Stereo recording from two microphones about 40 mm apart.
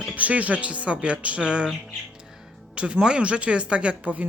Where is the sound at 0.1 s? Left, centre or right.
Right.